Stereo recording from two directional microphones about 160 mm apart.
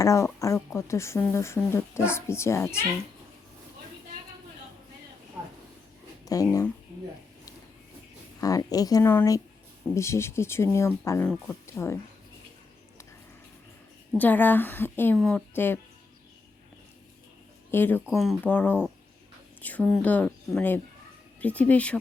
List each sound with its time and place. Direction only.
0.0 s speech: 20° left (ahead or behind)
6.2 s speech: 20° left (ahead or behind)
8.4 s speech: 20° left (ahead or behind)
14.2 s speech: 10° left (ahead or behind)
17.7 s speech: 10° left (ahead or behind)
18.0 s speech: centre (ahead or behind)